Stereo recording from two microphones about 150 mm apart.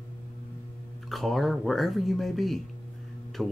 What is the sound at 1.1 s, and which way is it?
Speech, centre (ahead or behind).